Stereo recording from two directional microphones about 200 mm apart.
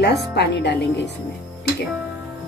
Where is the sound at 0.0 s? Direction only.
55° left (ahead or behind).